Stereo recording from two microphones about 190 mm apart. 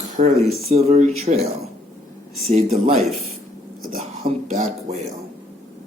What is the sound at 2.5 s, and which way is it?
Speech, 35° right (ahead or behind).